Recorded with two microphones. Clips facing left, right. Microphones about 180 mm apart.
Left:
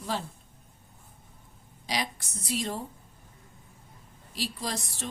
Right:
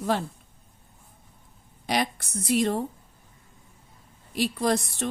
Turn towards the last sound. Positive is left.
turn(degrees=-60)  # may be behind; listen again after turning